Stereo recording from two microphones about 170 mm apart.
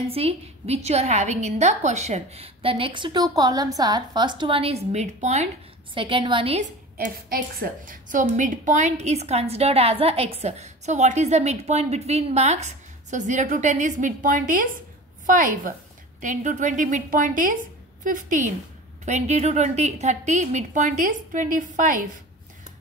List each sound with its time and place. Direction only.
0.0 s a woman's voice: 35° right (ahead or behind)
5.9 s a woman's voice: 30° right (ahead or behind)
7.2 s a woman's voice: 65° right (ahead or behind)